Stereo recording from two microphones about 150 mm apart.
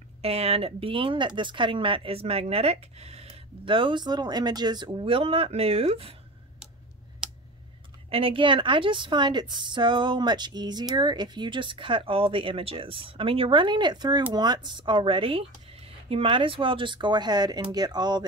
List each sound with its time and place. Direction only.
0.2 s a woman's voice: 45° right (ahead or behind)
7.2 s a sound: 5° right (ahead or behind)
8.1 s a woman's voice: 40° right (ahead or behind)